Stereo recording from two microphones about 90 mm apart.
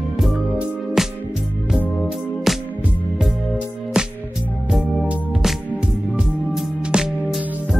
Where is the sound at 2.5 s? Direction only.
5° right (ahead or behind).